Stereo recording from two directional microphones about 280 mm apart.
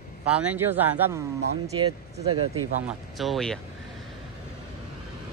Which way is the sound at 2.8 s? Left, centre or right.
Centre.